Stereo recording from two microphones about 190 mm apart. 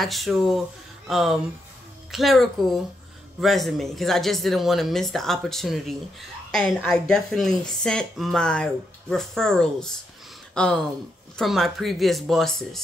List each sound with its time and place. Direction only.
0.0 s speech: centre (ahead or behind)